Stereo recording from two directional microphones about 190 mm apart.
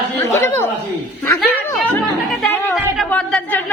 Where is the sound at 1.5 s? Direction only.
10° left (ahead or behind).